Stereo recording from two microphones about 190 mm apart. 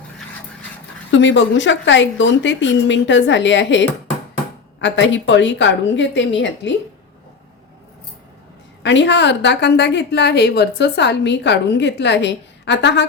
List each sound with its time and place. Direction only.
1.1 s a woman's voice: 75° left (ahead or behind)
8.8 s a woman's voice: 70° left (ahead or behind)